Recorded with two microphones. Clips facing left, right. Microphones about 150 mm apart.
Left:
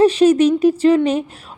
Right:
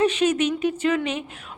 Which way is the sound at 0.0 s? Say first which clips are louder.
Left 9 dB; 35° left (ahead or behind).